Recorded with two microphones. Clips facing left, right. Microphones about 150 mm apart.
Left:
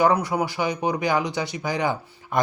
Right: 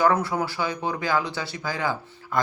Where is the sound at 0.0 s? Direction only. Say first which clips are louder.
Left 2 dB; 15° left (ahead or behind).